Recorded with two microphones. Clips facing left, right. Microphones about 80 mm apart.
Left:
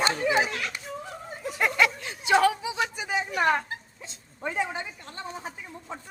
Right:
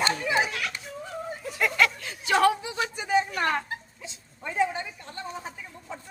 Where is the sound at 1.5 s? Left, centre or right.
Left.